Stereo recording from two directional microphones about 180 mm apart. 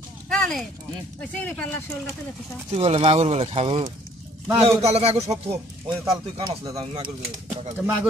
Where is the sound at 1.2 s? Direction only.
10° left (ahead or behind).